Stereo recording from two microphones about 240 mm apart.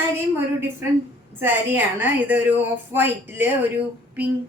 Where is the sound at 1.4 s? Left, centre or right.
Centre.